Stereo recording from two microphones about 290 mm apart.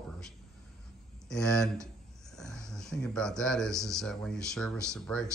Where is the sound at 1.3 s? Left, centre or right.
Centre.